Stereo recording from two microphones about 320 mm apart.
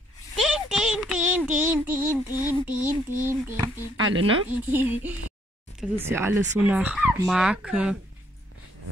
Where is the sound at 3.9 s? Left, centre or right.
Right.